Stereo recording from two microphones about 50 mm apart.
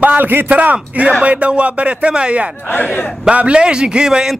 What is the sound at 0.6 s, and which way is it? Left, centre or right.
Speech, right.